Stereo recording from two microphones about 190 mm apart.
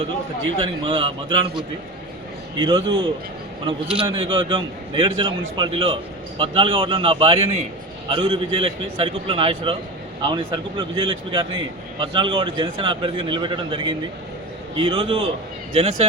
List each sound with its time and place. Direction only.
0.6 s a man's voice: 25° right (ahead or behind)
2.6 s a man's voice: 25° right (ahead or behind)